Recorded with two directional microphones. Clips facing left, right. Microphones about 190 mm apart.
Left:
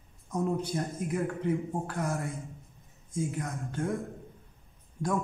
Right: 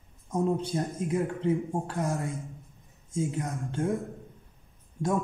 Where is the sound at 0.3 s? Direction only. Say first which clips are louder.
Right 3 dB; 30° right (ahead or behind).